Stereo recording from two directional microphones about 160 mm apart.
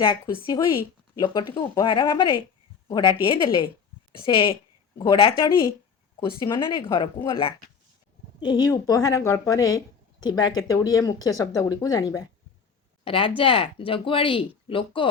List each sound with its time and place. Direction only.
1.2 s speech: 25° left (ahead or behind)
13.1 s speech: 35° left (ahead or behind)